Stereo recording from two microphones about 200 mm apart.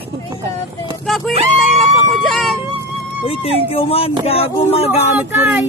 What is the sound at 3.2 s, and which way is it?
Speech, 30° left (ahead or behind).